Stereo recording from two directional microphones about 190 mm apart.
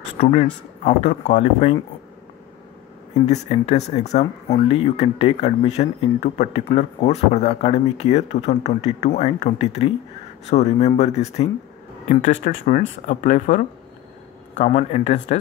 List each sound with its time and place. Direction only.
0.3 s speech: 40° left (ahead or behind)
3.3 s speech: 35° left (ahead or behind)